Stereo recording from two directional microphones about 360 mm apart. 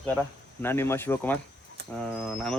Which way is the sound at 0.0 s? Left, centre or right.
Centre.